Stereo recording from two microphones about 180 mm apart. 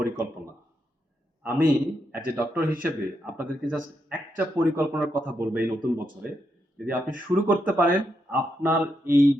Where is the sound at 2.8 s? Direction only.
10° right (ahead or behind).